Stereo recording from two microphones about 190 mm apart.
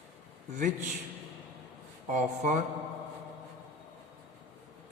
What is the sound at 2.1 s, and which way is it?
Speech, 40° right (ahead or behind).